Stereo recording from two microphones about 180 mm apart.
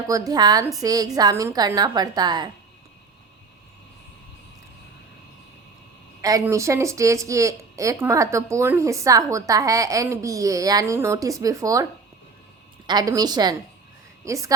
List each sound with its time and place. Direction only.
0.1 s a woman's voice: 20° right (ahead or behind)
6.2 s speech: 20° right (ahead or behind)
12.9 s a woman's voice: 20° right (ahead or behind)